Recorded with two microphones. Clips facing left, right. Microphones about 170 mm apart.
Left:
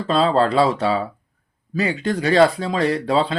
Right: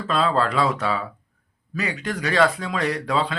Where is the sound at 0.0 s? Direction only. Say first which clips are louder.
Left 4 dB; 30° left (ahead or behind).